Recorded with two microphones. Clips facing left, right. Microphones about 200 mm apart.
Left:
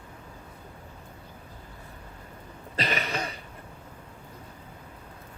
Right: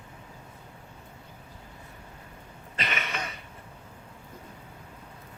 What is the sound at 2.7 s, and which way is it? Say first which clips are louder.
Cough: left 4 dB; 35° left (ahead or behind).